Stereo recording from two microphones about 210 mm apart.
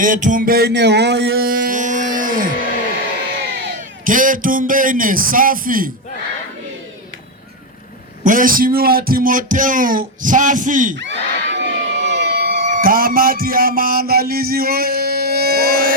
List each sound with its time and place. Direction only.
0.0 s music: 40° right (ahead or behind)
4.0 s speech: 40° right (ahead or behind)
8.2 s speech: 40° right (ahead or behind)
11.0 s a sound: 55° right (ahead or behind)